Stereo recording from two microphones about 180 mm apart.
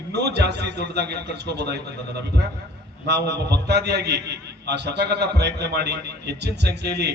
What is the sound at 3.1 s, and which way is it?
A man's voice, 70° right (ahead or behind).